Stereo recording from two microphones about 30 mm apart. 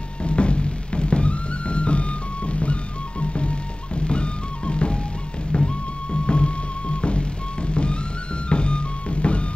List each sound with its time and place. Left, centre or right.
0.2 s music: left